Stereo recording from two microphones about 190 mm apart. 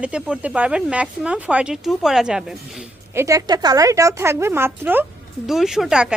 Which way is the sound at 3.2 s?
15° right (ahead or behind).